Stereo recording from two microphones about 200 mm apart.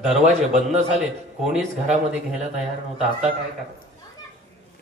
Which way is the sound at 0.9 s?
Centre (ahead or behind).